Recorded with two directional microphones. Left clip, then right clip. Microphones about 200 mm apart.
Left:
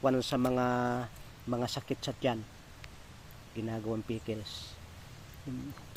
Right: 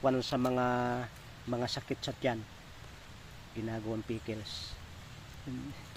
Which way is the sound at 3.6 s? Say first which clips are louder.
Left 1 dB; 25° left (ahead or behind).